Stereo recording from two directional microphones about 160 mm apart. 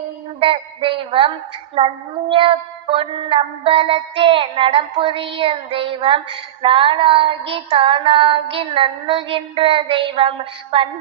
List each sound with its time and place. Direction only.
0.3 s a woman's voice: 35° right (ahead or behind)
2.3 s music: 35° right (ahead or behind)